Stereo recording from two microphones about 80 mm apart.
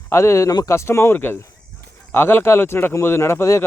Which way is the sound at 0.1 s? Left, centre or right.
Left.